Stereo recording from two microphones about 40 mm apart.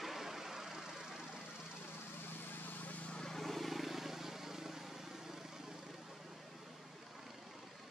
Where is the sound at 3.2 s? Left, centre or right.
Centre.